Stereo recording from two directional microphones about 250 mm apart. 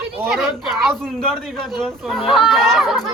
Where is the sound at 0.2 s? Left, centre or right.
Centre.